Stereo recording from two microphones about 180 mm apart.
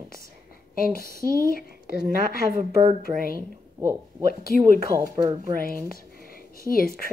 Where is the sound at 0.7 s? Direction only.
55° left (ahead or behind).